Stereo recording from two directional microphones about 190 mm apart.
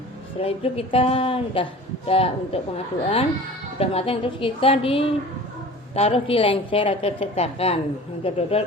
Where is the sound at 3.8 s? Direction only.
30° left (ahead or behind).